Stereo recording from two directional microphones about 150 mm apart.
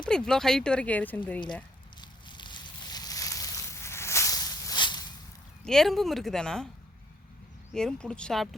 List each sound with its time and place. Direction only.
0.0 s speech: 5° left (ahead or behind)
2.0 s a sound: 30° left (ahead or behind)
5.6 s speech: 5° left (ahead or behind)
7.7 s speech: 5° left (ahead or behind)